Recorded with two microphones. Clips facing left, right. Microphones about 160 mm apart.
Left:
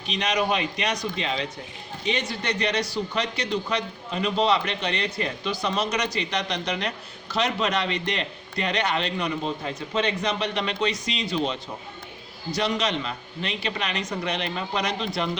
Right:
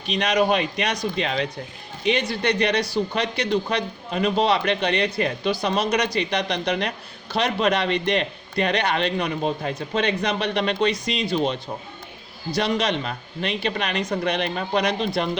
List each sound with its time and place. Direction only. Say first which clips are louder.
0.1 s a man's voice: right 4 dB; 55° right (ahead or behind)
12.7 s a man's voice: right 3 dB; 55° right (ahead or behind)